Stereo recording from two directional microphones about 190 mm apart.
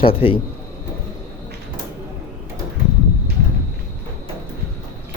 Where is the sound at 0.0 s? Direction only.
30° left (ahead or behind).